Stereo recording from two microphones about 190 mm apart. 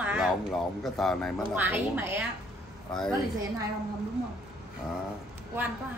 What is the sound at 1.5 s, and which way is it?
Speech, 10° right (ahead or behind).